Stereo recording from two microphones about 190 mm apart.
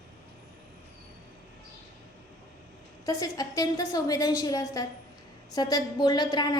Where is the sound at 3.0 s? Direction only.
20° left (ahead or behind).